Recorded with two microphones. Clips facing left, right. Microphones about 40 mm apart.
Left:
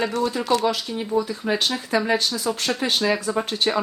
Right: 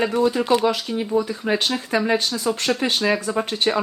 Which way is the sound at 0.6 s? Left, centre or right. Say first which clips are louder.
Right 2 dB; centre.